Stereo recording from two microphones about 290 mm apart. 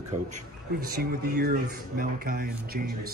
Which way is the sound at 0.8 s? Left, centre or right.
Right.